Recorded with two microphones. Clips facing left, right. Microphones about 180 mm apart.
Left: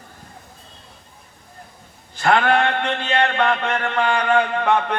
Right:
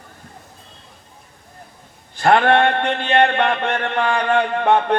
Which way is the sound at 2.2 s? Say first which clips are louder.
Right 3 dB; 30° right (ahead or behind).